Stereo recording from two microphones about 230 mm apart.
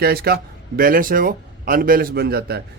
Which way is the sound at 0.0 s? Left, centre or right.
Right.